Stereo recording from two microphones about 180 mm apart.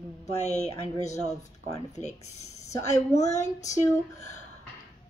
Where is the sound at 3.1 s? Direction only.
40° left (ahead or behind).